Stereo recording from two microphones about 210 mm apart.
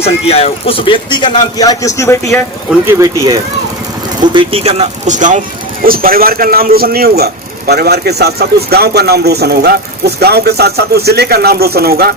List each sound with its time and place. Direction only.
0.0 s speech: 30° left (ahead or behind)
2.8 s a man's voice: 15° right (ahead or behind); by 12.1 s 45° right (ahead or behind)